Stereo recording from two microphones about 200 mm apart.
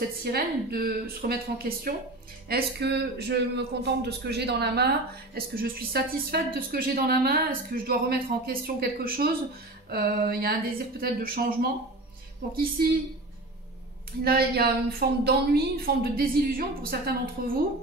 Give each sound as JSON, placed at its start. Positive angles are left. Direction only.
{"t": 0.0, "sound": "speech", "side_deg": -50}
{"t": 14.2, "sound": "speech", "side_deg": -50}